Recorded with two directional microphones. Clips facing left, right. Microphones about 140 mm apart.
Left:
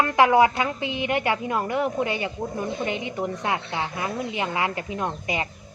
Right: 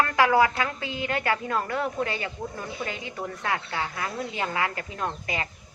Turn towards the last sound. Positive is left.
turn(degrees=20)  # may be behind; listen again after turning